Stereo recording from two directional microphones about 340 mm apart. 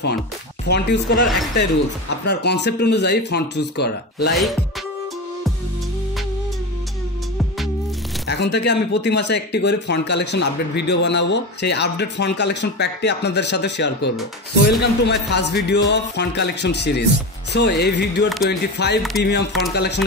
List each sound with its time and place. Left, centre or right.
0.7 s speech: left
4.3 s music: centre
8.3 s speech: left